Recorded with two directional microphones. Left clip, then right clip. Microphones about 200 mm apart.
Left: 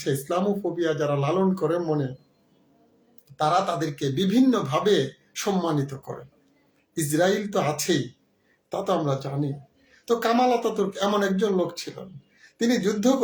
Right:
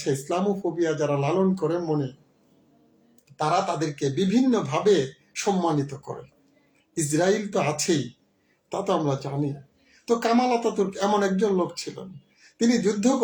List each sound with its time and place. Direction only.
0.0 s speech: 10° left (ahead or behind)
3.3 s speech: 10° left (ahead or behind)
8.7 s speech: 10° left (ahead or behind)